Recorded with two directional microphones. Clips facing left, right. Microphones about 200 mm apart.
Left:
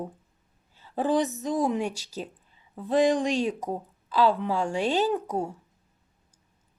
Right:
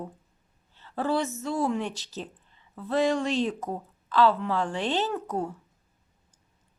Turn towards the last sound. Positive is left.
turn(degrees=10)  # may be behind; listen again after turning